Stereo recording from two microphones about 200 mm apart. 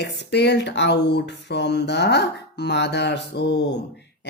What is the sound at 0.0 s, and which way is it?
Speech, 55° left (ahead or behind).